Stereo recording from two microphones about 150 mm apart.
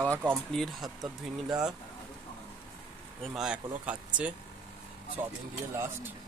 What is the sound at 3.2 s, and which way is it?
Speech, centre (ahead or behind).